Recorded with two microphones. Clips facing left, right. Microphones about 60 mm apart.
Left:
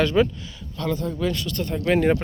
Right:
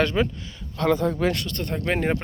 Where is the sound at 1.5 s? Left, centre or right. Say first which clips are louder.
Left 2 dB; right.